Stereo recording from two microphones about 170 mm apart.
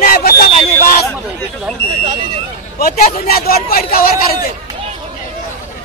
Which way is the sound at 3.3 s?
65° left (ahead or behind).